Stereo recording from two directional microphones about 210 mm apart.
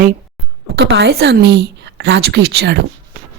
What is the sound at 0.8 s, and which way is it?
A woman's voice, 55° right (ahead or behind).